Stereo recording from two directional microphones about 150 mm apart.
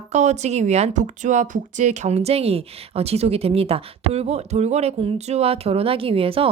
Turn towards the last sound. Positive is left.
turn(degrees=-40)  # may be behind; listen again after turning